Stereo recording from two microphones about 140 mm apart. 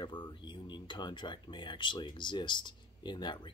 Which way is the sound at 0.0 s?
35° left (ahead or behind).